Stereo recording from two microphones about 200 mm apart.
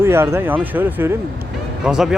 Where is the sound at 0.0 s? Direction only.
10° right (ahead or behind).